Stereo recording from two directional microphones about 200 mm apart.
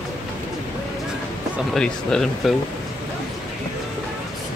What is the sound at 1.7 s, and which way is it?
Speech, 5° left (ahead or behind).